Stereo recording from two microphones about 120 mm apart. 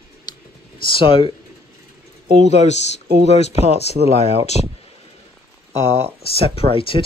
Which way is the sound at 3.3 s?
65° left (ahead or behind).